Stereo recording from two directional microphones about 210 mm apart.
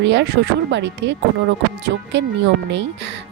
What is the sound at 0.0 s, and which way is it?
Speech, 55° right (ahead or behind).